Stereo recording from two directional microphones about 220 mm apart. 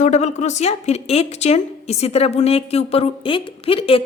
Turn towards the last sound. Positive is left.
turn(degrees=25)  # may be behind; listen again after turning